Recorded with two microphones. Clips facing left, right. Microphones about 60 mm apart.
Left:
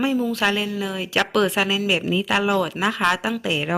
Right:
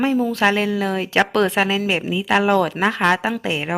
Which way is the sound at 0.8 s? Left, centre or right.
Right.